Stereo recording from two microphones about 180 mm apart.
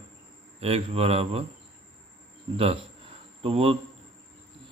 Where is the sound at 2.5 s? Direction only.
30° right (ahead or behind).